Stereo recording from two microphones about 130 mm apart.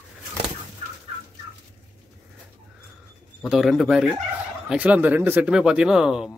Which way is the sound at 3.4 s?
5° right (ahead or behind).